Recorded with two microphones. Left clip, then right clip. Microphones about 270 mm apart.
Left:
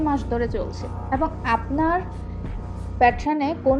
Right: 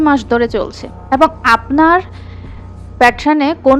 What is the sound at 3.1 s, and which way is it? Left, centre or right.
Speech, right.